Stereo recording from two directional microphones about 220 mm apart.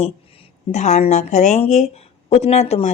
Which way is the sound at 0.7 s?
30° left (ahead or behind).